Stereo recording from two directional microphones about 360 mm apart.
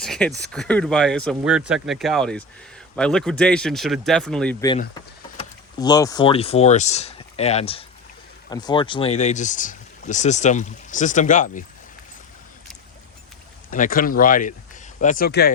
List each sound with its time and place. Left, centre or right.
0.0 s speech: centre; by 11.6 s left
13.7 s speech: left